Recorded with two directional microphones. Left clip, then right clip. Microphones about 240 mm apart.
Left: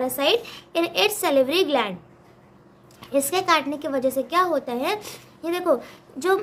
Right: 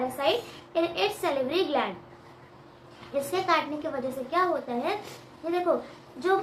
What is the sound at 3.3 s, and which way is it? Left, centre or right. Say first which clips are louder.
A woman's voice: left 3 dB; left.